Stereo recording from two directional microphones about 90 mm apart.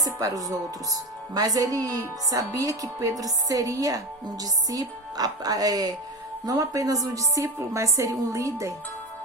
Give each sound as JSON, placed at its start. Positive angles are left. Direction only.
{"t": 0.0, "sound": "speech", "side_deg": -40}